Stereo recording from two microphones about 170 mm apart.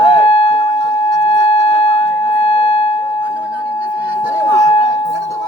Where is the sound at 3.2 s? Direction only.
10° right (ahead or behind).